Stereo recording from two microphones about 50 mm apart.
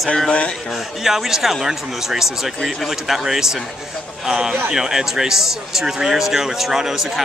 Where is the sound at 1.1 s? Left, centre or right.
Centre.